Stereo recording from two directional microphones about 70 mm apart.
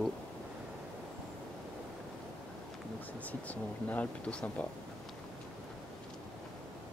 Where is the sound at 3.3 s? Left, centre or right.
Left.